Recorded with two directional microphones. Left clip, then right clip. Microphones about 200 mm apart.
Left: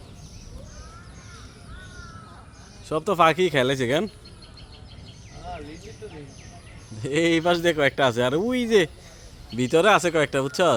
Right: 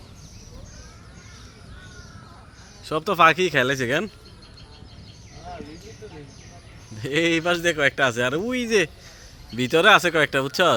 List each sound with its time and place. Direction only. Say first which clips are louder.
2.8 s speech: right 2 dB; 5° left (ahead or behind)
7.0 s a man's voice: even; 5° left (ahead or behind)
9.6 s speech: right 2 dB; 5° left (ahead or behind)